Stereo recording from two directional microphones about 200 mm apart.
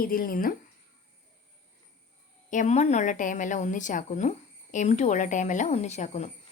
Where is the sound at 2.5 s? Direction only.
35° left (ahead or behind).